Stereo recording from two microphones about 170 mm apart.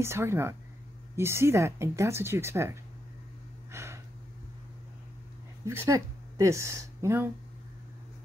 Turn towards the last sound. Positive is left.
turn(degrees=-15)  # may be behind; listen again after turning